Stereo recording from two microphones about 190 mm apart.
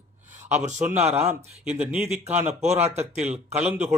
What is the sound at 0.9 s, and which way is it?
Speech, 10° right (ahead or behind).